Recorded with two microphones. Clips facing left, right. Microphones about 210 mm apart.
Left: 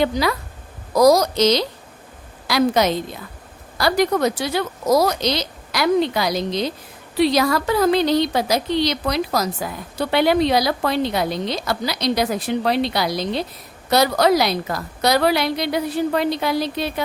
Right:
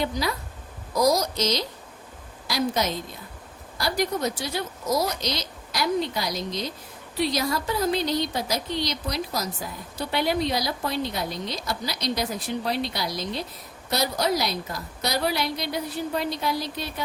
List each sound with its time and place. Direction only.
0.0 s a woman's voice: 75° left (ahead or behind)